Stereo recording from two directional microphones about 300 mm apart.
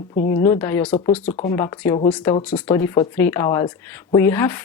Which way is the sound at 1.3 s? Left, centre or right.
Left.